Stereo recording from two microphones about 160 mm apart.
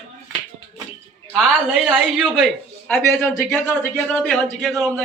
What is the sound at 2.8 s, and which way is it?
A man's voice, 5° left (ahead or behind).